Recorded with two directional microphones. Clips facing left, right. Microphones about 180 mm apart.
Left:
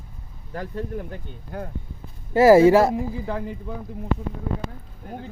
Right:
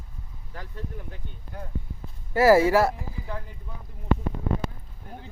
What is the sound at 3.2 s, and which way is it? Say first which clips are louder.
Speech: left 9 dB; 90° left.